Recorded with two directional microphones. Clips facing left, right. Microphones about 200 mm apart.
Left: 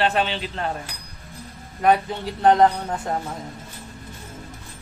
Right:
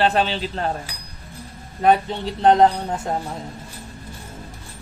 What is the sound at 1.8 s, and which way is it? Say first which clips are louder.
A man's voice: right 2 dB; 25° right (ahead or behind).